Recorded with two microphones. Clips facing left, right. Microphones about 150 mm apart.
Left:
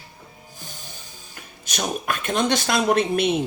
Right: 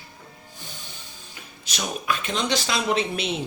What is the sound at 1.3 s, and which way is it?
Speech, 50° left (ahead or behind).